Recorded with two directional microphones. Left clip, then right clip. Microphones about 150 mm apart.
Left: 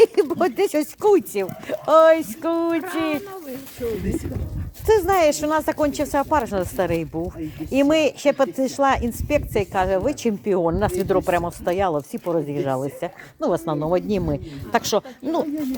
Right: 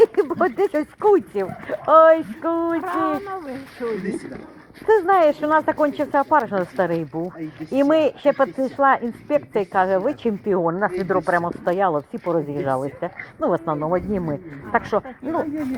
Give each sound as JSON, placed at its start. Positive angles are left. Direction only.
{"t": 0.0, "sound": "speech", "side_deg": 40}
{"t": 2.8, "sound": "speech", "side_deg": -5}
{"t": 4.9, "sound": "speech", "side_deg": 40}
{"t": 11.4, "sound": "speech", "side_deg": 35}
{"t": 13.9, "sound": "speech", "side_deg": 60}